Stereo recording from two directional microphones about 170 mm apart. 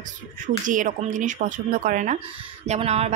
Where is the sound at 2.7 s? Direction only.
35° right (ahead or behind).